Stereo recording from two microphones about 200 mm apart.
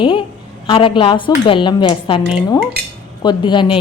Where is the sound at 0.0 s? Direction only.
25° left (ahead or behind).